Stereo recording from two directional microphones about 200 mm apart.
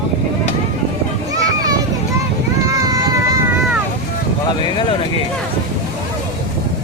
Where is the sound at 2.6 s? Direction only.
15° right (ahead or behind).